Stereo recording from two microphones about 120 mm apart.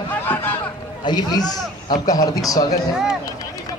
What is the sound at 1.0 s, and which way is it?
A man's voice, 35° left (ahead or behind).